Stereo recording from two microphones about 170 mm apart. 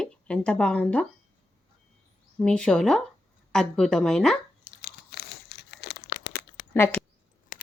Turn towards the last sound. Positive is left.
turn(degrees=15)  # may be behind; listen again after turning